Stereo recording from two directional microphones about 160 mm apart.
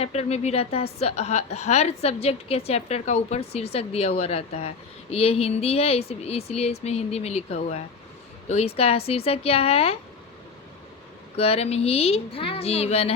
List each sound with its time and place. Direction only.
0.0 s a woman's voice: 40° left (ahead or behind)
11.3 s a woman's voice: 40° left (ahead or behind)